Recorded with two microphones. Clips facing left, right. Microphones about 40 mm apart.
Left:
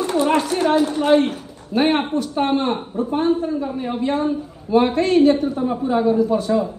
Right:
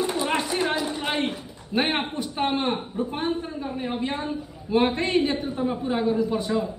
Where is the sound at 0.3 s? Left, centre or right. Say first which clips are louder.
Left 7 dB; right.